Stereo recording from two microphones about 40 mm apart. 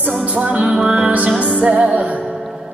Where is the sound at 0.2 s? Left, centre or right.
Right.